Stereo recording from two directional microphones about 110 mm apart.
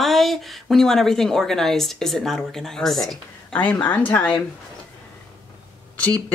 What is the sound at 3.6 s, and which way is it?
Speech, 15° left (ahead or behind).